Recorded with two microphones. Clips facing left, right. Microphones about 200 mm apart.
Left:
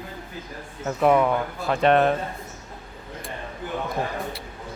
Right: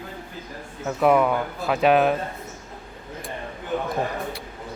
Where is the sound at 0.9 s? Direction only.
Centre (ahead or behind).